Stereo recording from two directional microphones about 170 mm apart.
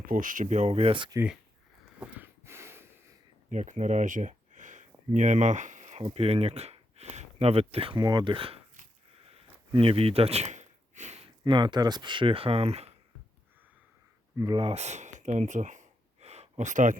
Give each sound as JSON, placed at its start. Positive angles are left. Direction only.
{"t": 0.0, "sound": "speech", "side_deg": -55}
{"t": 2.0, "sound": "a sound", "side_deg": -10}
{"t": 3.5, "sound": "a sound", "side_deg": -45}
{"t": 5.1, "sound": "speech", "side_deg": -45}
{"t": 9.7, "sound": "speech", "side_deg": -30}
{"t": 14.3, "sound": "speech", "side_deg": -25}